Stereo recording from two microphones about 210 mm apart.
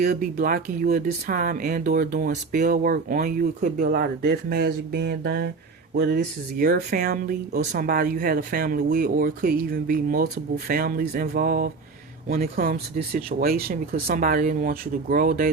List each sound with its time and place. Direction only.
0.0 s speech: 40° right (ahead or behind)